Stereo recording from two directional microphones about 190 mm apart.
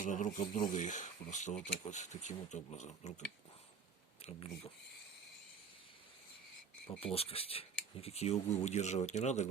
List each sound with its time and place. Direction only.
0.0 s speech: 40° left (ahead or behind)
7.0 s speech: 30° left (ahead or behind)